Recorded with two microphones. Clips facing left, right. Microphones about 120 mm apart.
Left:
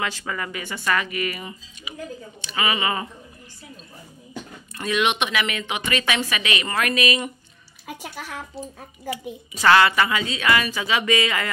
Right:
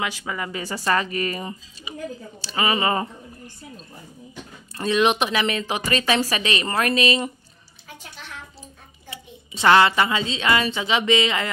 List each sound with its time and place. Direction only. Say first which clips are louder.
0.0 s speech: even; 15° right (ahead or behind)
0.5 s speech: right 3 dB; 35° right (ahead or behind)
4.7 s speech: right 3 dB; 35° right (ahead or behind)
7.8 s a woman's voice: left 7 dB; 90° left
9.1 s a woman's voice: left 8 dB; 25° right (ahead or behind)